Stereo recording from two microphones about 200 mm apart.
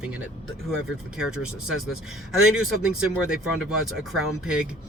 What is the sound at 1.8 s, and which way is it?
Speech, centre (ahead or behind).